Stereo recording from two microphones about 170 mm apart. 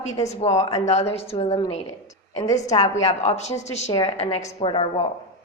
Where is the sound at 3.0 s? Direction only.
40° left (ahead or behind).